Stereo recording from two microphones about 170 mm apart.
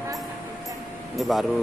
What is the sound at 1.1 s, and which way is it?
Speech, centre (ahead or behind).